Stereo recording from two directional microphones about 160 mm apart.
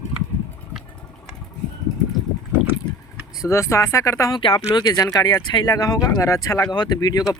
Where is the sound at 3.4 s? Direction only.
20° left (ahead or behind).